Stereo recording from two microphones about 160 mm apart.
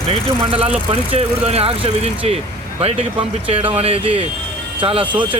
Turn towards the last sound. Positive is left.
turn(degrees=-35)  # may be behind; listen again after turning